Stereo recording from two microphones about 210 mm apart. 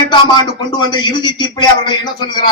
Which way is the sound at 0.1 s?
20° left (ahead or behind).